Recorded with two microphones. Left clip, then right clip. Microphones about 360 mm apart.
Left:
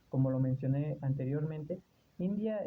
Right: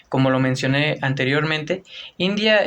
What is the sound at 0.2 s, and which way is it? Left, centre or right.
Speech, left.